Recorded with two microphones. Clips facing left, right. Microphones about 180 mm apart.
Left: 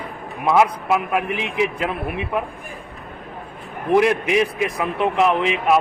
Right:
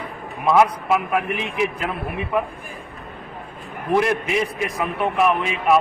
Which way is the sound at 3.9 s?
15° left (ahead or behind).